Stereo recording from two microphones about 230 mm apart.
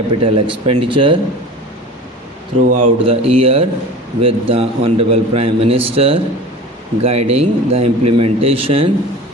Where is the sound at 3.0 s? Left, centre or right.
Right.